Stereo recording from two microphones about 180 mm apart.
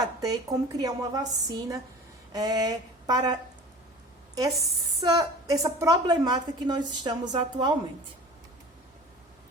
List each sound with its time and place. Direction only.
0.0 s a woman's voice: 20° right (ahead or behind)
4.9 s a woman's voice: 20° right (ahead or behind)